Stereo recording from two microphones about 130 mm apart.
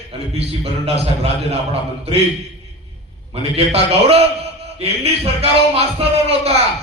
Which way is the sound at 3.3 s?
50° right (ahead or behind).